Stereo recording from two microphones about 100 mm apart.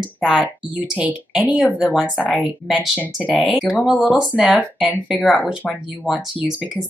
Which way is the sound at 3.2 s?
10° left (ahead or behind).